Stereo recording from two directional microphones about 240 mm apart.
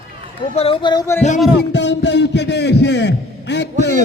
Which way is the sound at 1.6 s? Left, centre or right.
Left.